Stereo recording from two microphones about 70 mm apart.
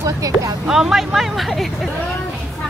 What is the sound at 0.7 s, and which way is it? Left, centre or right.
Speech, centre.